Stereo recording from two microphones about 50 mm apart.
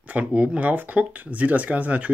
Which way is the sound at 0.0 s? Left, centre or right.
Right.